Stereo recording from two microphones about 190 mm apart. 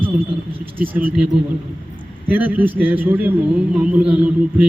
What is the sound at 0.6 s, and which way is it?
Mantra, 10° right (ahead or behind).